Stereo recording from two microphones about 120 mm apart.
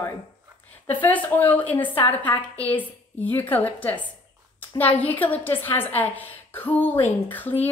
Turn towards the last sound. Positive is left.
turn(degrees=15)  # may be behind; listen again after turning